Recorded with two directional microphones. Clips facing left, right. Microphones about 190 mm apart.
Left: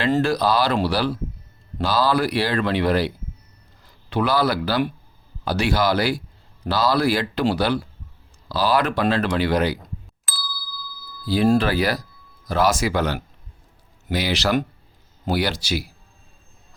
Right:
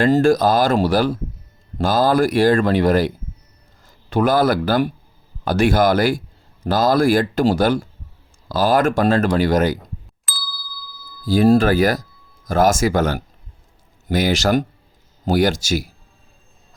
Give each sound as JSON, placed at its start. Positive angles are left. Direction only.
{"t": 0.0, "sound": "speech", "side_deg": -45}
{"t": 10.2, "sound": "ding", "side_deg": 0}
{"t": 11.3, "sound": "speech", "side_deg": -45}